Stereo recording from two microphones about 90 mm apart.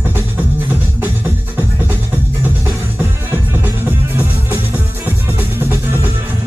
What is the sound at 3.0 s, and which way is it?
Music, 20° right (ahead or behind).